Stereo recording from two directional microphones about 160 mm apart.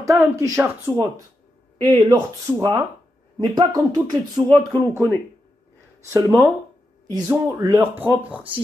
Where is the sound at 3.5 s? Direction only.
25° right (ahead or behind).